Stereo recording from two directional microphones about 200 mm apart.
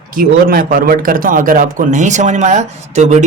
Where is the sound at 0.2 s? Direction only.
45° right (ahead or behind).